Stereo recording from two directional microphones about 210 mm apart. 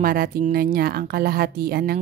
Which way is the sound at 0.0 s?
45° right (ahead or behind).